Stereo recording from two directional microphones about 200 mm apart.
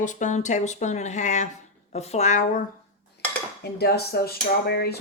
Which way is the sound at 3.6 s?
55° left (ahead or behind).